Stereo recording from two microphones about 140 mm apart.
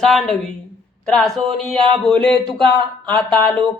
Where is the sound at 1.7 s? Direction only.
40° right (ahead or behind).